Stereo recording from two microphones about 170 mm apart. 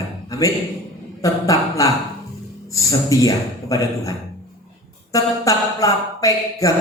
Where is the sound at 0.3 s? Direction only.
20° left (ahead or behind).